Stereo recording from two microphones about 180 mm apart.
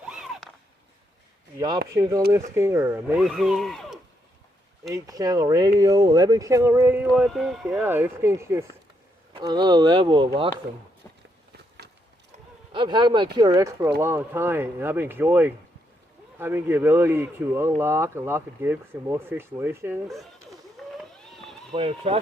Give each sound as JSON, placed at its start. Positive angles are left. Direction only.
{"t": 0.0, "sound": "a sound", "side_deg": -5}
{"t": 1.5, "sound": "speech", "side_deg": -20}
{"t": 4.9, "sound": "speech", "side_deg": -20}
{"t": 12.7, "sound": "speech", "side_deg": -25}
{"t": 21.3, "sound": "a sound", "side_deg": 0}
{"t": 21.7, "sound": "speech", "side_deg": -30}